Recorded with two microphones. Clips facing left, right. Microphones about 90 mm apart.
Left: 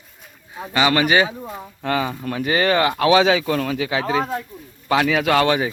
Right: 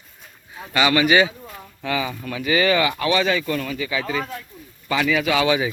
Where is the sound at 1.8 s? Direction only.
45° left (ahead or behind).